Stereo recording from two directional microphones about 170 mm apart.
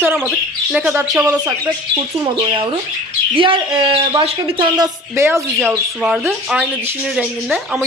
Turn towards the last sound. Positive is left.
turn(degrees=0)  # may be behind; listen again after turning